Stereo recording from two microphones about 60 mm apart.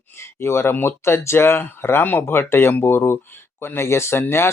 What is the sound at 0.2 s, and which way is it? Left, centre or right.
Speech, left.